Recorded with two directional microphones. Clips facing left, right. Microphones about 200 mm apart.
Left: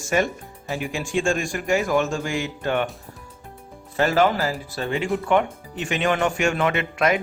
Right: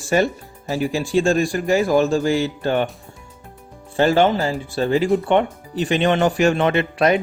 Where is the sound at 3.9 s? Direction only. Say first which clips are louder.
Right 4 dB; 30° right (ahead or behind).